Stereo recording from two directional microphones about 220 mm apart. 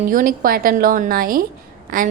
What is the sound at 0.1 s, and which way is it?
A woman's voice, 40° right (ahead or behind).